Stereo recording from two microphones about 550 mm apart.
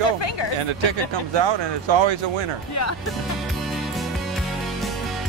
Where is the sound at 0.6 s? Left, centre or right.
Right.